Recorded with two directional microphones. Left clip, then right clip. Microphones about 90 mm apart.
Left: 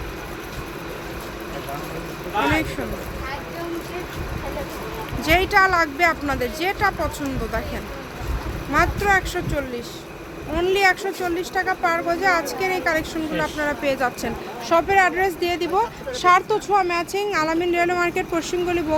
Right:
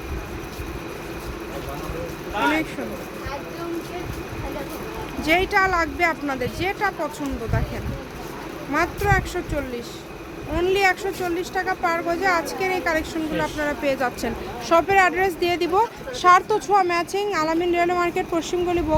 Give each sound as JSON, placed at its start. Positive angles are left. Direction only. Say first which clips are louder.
{"t": 5.2, "sound": "speech", "louder": "left 2 dB", "side_deg": 0}
{"t": 8.7, "sound": "speech", "louder": "left 3 dB", "side_deg": 0}
{"t": 14.7, "sound": "speech", "louder": "even", "side_deg": -40}
{"t": 16.1, "sound": "speech", "louder": "right 1 dB", "side_deg": -10}
{"t": 17.2, "sound": "speech", "louder": "left 1 dB", "side_deg": -5}
{"t": 18.7, "sound": "speech", "louder": "even", "side_deg": -10}